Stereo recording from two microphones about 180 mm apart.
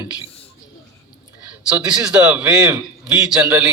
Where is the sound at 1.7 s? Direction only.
5° right (ahead or behind).